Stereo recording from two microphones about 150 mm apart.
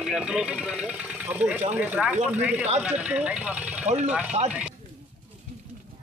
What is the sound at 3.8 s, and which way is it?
Speech, 50° right (ahead or behind).